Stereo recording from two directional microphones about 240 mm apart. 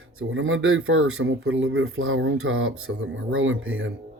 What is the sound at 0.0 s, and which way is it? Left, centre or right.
Speech, right.